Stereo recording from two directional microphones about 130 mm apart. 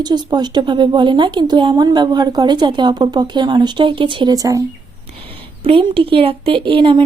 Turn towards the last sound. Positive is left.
turn(degrees=-40)  # may be behind; listen again after turning